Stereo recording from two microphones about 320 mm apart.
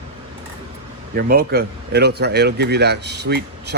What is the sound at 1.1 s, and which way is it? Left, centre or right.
Speech, right.